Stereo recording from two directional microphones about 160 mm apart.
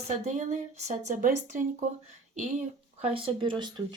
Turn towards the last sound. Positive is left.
turn(degrees=-30)  # may be behind; listen again after turning